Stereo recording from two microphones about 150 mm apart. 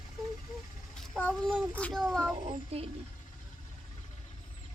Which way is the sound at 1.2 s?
10° left (ahead or behind).